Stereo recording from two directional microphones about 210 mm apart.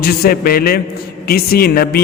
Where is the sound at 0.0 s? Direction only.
45° left (ahead or behind).